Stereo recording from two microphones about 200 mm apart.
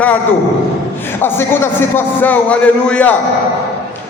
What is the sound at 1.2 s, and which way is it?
A man's voice, 10° left (ahead or behind).